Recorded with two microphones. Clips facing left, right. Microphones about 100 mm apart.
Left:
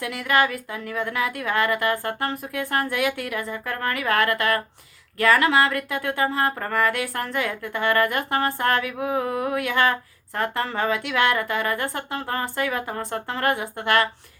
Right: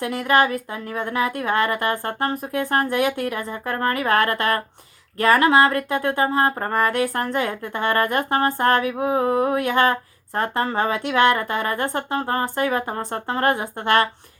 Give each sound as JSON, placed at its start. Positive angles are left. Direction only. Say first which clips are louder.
{"t": 0.0, "sound": "speech", "louder": "right 3 dB", "side_deg": -30}